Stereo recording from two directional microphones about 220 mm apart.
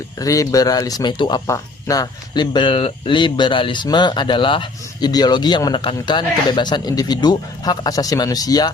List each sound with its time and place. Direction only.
0.2 s speech: 15° left (ahead or behind)